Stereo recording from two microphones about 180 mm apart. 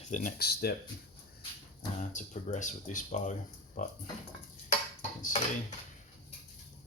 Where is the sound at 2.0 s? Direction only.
45° left (ahead or behind).